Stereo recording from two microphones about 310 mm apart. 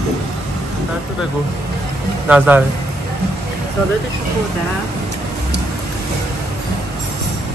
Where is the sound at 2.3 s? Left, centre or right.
Centre.